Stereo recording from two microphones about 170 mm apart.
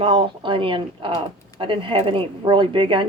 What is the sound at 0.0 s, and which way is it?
Speech, 35° right (ahead or behind).